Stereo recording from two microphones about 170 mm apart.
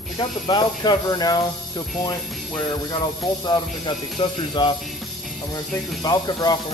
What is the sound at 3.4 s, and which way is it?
Speech, 25° left (ahead or behind).